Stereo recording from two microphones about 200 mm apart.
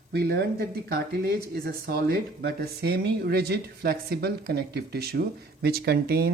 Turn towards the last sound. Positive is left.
turn(degrees=-50)  # may be behind; listen again after turning